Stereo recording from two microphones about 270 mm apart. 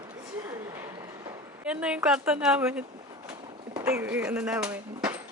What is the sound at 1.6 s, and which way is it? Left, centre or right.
Speech, centre.